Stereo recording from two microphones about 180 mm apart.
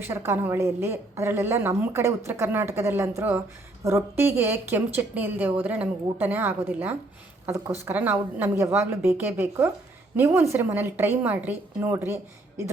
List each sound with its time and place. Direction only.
0.0 s a woman's voice: 15° right (ahead or behind)